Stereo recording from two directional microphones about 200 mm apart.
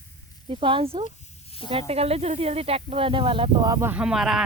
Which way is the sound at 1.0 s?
30° left (ahead or behind).